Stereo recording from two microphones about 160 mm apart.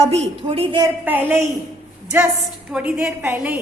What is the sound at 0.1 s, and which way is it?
Speech, 35° right (ahead or behind).